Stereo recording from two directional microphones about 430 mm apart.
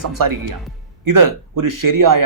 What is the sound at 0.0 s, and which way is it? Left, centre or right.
Speech, right.